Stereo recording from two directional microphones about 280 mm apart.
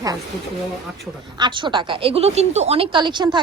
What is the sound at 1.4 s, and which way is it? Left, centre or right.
A woman's voice, centre.